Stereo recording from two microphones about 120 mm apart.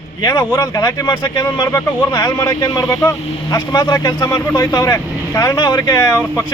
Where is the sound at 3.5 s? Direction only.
35° left (ahead or behind).